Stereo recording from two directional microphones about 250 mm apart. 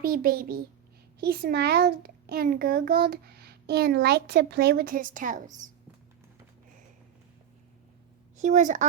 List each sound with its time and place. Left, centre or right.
0.0 s a child's voice: right
8.4 s a child's voice: right